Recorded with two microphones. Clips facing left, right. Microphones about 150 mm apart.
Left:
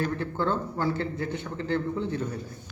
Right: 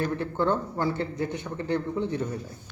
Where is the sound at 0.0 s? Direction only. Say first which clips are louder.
Right 2 dB; 20° right (ahead or behind).